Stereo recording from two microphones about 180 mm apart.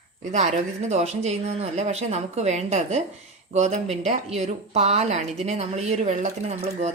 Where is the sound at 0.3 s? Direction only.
40° right (ahead or behind).